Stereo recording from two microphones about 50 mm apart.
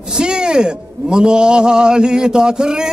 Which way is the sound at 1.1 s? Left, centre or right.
Centre.